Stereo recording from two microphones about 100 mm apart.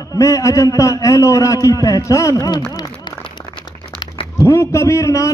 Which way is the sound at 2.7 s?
40° left (ahead or behind).